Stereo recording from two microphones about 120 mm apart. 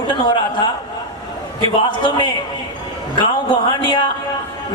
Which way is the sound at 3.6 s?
40° left (ahead or behind).